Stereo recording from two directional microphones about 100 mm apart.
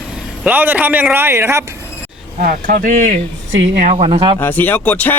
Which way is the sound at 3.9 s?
80° right.